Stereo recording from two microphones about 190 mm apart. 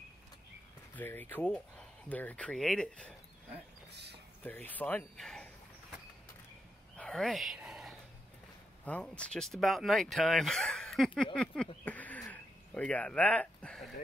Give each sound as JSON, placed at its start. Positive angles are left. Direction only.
{"t": 0.9, "sound": "speech", "side_deg": 10}
{"t": 3.9, "sound": "speech", "side_deg": -60}
{"t": 4.5, "sound": "speech", "side_deg": 10}
{"t": 7.0, "sound": "whispering", "side_deg": 5}
{"t": 8.8, "sound": "speech", "side_deg": 5}